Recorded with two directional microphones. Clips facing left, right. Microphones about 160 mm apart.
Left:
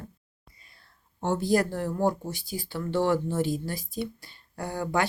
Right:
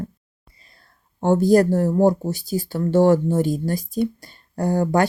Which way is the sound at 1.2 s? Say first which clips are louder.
Right 9 dB; 45° right (ahead or behind).